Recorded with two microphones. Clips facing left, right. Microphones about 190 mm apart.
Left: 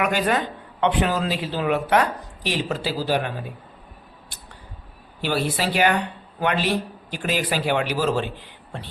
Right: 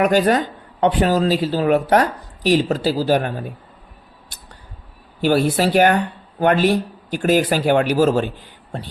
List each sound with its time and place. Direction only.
0.0 s a woman's voice: 40° right (ahead or behind)
5.2 s speech: 45° right (ahead or behind)